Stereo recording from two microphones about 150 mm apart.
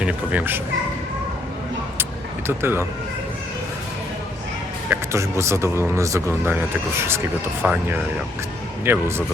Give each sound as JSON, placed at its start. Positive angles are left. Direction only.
{"t": 0.0, "sound": "speech", "side_deg": -10}
{"t": 2.5, "sound": "speech", "side_deg": -15}
{"t": 4.9, "sound": "speech", "side_deg": -20}